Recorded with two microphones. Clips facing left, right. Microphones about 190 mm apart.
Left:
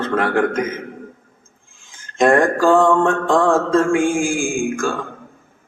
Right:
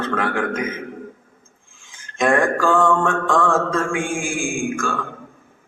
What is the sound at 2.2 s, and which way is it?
A man's voice, 40° left (ahead or behind).